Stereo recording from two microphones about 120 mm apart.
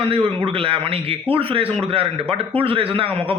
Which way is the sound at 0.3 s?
50° right (ahead or behind).